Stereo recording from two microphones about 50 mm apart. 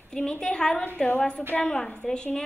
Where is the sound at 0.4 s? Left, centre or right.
Centre.